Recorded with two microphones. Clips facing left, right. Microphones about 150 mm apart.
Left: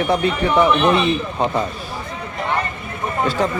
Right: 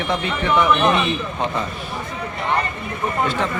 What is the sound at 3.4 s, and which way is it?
Speech, 35° left (ahead or behind).